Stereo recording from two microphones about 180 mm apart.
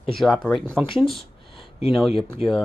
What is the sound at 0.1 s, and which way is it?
Speech, centre (ahead or behind).